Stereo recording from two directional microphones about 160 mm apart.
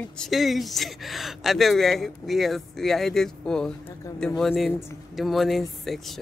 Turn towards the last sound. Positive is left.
turn(degrees=0)  # may be behind; listen again after turning